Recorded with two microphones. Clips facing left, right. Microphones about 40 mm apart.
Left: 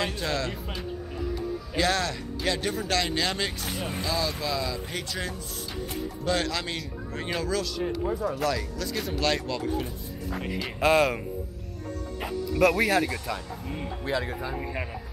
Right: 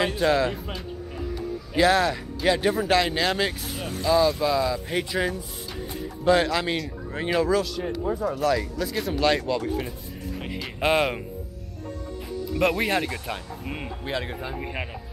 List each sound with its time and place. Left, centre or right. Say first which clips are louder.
0.0 s speech: right 7 dB; centre
10.8 s speech: even; centre
12.7 s speech: left 1 dB; right